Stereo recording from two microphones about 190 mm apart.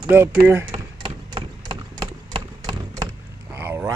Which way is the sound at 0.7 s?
25° right (ahead or behind).